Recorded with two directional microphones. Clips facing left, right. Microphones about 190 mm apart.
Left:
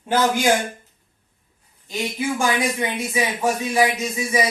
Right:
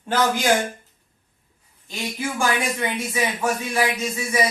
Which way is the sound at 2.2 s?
15° left (ahead or behind).